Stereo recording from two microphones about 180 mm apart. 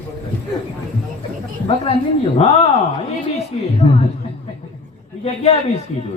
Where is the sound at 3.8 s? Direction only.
30° left (ahead or behind).